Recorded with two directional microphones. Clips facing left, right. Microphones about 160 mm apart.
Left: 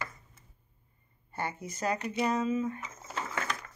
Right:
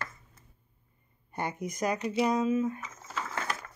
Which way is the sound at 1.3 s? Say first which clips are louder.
Right 3 dB; 15° right (ahead or behind).